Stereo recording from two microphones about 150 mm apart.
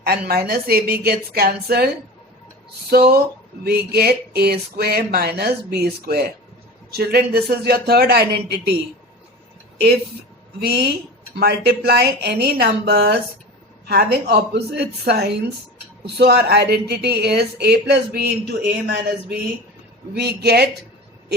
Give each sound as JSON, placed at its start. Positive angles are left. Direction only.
{"t": 0.0, "sound": "speech", "side_deg": -90}
{"t": 2.9, "sound": "speech", "side_deg": -90}
{"t": 10.6, "sound": "speech", "side_deg": -90}